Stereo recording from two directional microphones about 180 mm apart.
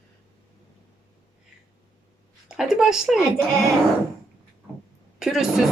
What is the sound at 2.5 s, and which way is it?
Speech, 5° right (ahead or behind).